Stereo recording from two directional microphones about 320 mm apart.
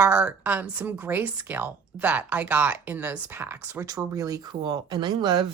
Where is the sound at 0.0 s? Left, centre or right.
Centre.